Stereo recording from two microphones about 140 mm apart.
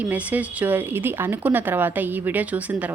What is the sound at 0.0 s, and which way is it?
A woman's voice, 10° right (ahead or behind).